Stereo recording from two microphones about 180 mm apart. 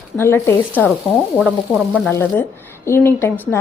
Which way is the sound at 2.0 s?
10° left (ahead or behind).